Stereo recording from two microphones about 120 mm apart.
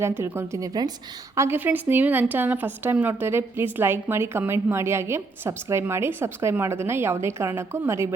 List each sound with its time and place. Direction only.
0.0 s a woman's voice: 20° right (ahead or behind)
1.4 s a woman's voice: 15° right (ahead or behind)